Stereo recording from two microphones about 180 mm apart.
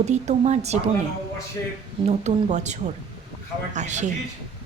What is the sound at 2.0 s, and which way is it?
A woman's voice, 40° right (ahead or behind).